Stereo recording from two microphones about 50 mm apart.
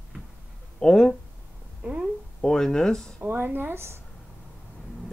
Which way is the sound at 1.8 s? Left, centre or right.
Right.